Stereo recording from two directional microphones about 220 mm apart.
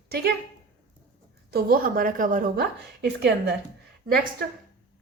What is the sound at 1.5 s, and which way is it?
A woman's voice, 40° right (ahead or behind).